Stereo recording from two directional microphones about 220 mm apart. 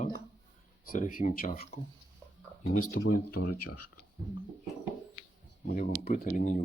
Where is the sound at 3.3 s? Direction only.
90° left.